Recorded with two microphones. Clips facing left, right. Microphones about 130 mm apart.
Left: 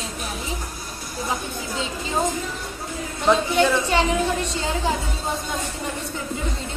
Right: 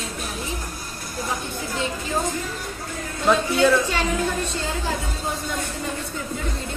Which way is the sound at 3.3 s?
20° left (ahead or behind).